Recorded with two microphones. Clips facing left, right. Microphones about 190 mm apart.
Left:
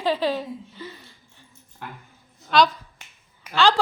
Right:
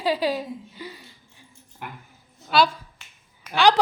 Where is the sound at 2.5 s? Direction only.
10° right (ahead or behind).